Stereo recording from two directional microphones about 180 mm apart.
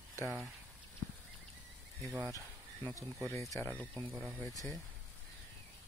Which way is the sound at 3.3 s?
15° left (ahead or behind).